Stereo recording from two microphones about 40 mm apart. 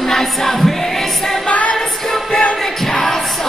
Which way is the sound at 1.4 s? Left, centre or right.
Left.